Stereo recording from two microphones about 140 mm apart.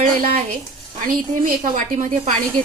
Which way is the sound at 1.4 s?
65° right (ahead or behind).